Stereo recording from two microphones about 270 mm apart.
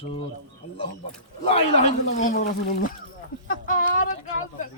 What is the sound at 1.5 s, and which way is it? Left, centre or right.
Speech, left.